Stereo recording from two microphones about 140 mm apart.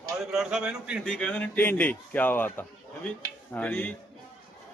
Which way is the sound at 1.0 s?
5° left (ahead or behind).